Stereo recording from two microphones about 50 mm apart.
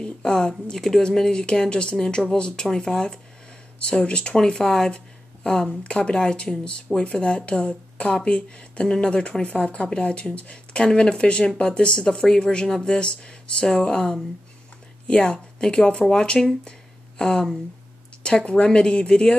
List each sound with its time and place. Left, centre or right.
0.0 s speech: centre